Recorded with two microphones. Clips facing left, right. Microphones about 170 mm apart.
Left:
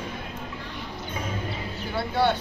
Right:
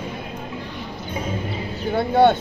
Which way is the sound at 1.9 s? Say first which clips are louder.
Right 8 dB; 50° right (ahead or behind).